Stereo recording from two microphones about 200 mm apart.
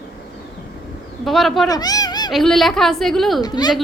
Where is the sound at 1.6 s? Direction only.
20° left (ahead or behind).